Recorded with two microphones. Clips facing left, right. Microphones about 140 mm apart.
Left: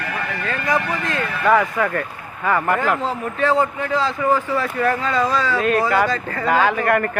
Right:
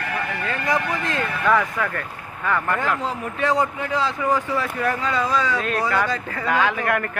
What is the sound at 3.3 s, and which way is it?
Speech, 15° right (ahead or behind).